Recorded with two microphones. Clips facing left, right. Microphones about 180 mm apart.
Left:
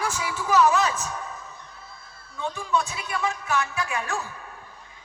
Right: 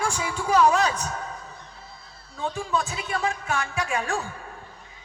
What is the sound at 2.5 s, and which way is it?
Music, 35° right (ahead or behind).